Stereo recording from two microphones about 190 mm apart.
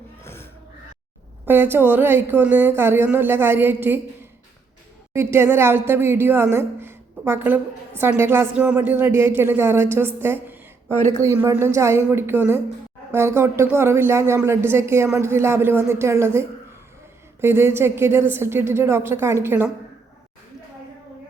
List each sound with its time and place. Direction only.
1.5 s a woman's voice: 10° right (ahead or behind)
5.1 s a woman's voice: 15° right (ahead or behind)